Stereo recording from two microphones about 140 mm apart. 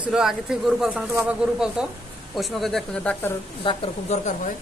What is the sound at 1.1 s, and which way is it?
Speech, 15° right (ahead or behind).